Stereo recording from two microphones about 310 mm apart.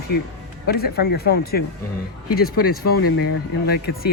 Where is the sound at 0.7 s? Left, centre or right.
Left.